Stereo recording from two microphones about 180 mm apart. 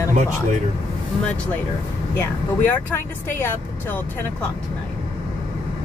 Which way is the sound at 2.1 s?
10° left (ahead or behind).